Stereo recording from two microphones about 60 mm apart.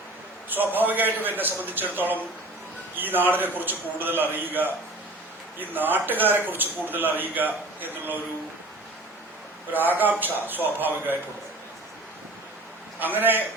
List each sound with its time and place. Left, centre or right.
0.5 s a man's voice: right
9.7 s a man's voice: right
13.0 s a man's voice: right